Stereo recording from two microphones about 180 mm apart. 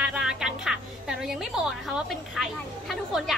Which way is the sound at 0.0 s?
5° right (ahead or behind).